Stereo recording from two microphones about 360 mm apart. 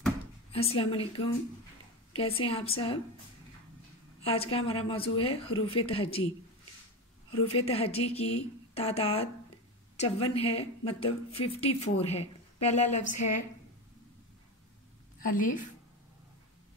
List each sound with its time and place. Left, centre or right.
0.5 s a woman's voice: centre
4.2 s a woman's voice: centre
7.5 s a woman's voice: centre
15.2 s a woman's voice: left